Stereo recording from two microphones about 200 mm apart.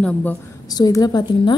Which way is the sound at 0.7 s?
20° left (ahead or behind).